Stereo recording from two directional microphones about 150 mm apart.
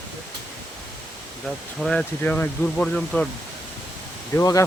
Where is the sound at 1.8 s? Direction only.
5° left (ahead or behind).